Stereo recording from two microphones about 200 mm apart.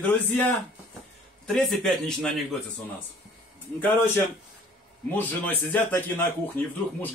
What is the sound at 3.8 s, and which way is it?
A man's voice, 10° left (ahead or behind).